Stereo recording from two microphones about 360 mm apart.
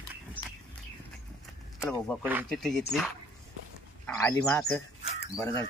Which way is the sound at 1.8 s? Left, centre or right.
Centre.